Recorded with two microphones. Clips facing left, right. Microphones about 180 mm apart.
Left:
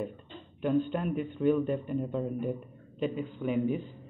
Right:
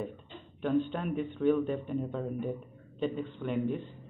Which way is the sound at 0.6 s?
Centre (ahead or behind).